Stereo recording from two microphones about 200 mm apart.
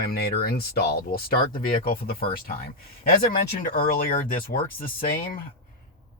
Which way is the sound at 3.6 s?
45° left (ahead or behind).